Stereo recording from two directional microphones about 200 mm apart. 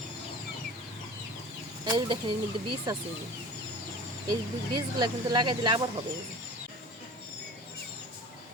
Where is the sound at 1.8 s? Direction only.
20° right (ahead or behind).